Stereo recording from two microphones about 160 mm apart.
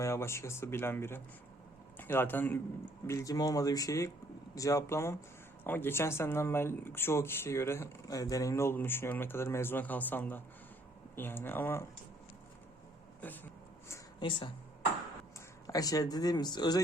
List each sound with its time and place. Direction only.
0.0 s speech: 15° left (ahead or behind)
14.2 s speech: 30° left (ahead or behind)
15.6 s speech: 20° left (ahead or behind)